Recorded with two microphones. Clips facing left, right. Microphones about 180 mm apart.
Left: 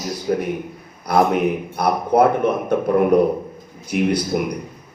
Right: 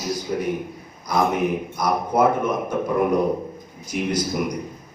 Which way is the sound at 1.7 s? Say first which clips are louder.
Left 5 dB; 60° left (ahead or behind).